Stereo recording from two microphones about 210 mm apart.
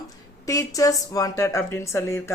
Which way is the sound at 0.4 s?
15° left (ahead or behind).